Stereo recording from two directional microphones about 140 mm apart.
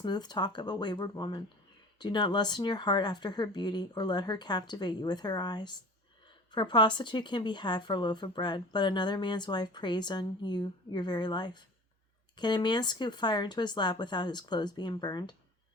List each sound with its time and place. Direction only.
0.0 s speech: 30° left (ahead or behind)